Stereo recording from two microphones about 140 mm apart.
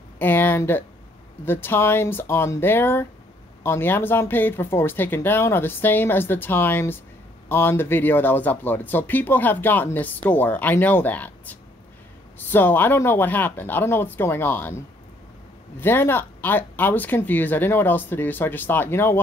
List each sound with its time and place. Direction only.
0.2 s a sound: 15° left (ahead or behind)
1.4 s speech: 15° left (ahead or behind)
15.8 s speech: 15° left (ahead or behind)